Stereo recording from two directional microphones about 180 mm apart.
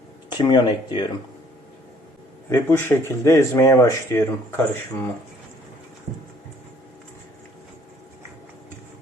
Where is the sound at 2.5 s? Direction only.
15° left (ahead or behind).